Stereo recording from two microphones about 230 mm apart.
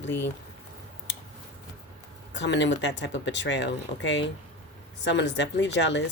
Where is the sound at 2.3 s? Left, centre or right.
Left.